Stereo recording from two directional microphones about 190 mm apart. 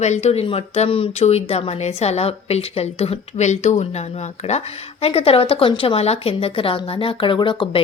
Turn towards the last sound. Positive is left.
turn(degrees=25)  # may be behind; listen again after turning